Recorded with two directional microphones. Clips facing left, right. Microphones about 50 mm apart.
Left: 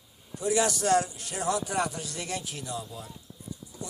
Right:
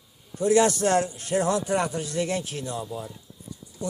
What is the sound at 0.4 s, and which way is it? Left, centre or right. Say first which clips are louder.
A man's voice: right 5 dB; right.